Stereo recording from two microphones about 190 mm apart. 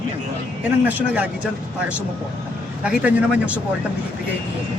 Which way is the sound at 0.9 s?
5° right (ahead or behind).